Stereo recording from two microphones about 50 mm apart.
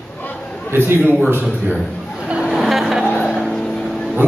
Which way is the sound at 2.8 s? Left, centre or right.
Centre.